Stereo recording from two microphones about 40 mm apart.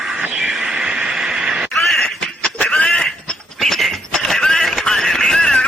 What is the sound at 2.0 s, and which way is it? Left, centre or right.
Quack, left.